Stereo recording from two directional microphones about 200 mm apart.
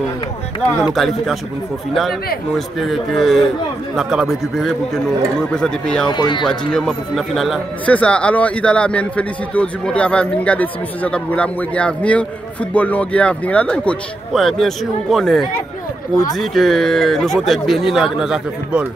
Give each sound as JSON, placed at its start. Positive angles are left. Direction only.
{"t": 0.8, "sound": "a man's voice", "side_deg": 0}
{"t": 2.5, "sound": "a man's voice", "side_deg": 0}
{"t": 6.0, "sound": "speech", "side_deg": 20}
{"t": 6.7, "sound": "a man's voice", "side_deg": 0}